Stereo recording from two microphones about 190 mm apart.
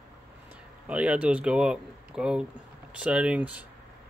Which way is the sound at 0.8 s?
5° right (ahead or behind).